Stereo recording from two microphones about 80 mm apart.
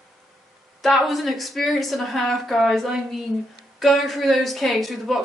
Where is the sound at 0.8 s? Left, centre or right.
Centre.